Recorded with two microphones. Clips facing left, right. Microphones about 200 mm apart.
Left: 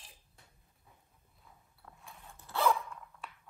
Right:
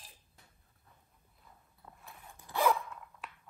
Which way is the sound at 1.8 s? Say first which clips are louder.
Even; 10° right (ahead or behind).